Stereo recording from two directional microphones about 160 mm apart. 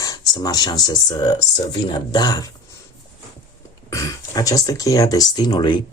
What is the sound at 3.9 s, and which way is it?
Speech, 20° left (ahead or behind).